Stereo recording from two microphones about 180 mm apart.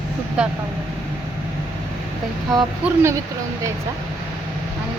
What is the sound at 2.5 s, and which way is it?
Speech, 20° right (ahead or behind).